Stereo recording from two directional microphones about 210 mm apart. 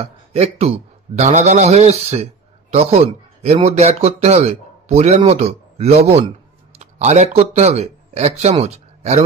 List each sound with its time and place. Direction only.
0.0 s a man's voice: 30° right (ahead or behind)